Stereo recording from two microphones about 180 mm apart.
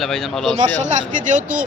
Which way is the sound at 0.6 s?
40° right (ahead or behind).